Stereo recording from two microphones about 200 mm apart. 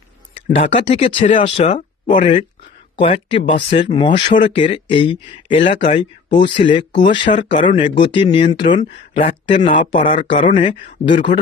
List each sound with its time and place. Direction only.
0.3 s speech: 30° left (ahead or behind)
9.1 s speech: 35° left (ahead or behind)